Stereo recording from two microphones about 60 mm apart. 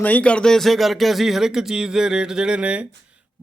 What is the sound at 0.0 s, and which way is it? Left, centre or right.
Speech, left.